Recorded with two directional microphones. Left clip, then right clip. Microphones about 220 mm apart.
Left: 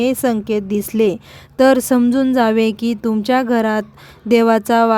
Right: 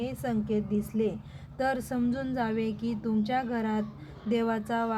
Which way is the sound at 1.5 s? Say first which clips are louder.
Left 17 dB; 55° left (ahead or behind).